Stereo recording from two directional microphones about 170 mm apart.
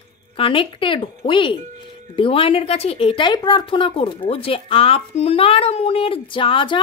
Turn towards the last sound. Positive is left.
turn(degrees=30)  # may be behind; listen again after turning